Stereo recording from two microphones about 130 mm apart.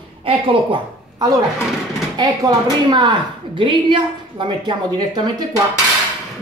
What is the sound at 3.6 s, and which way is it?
Speech, 40° right (ahead or behind).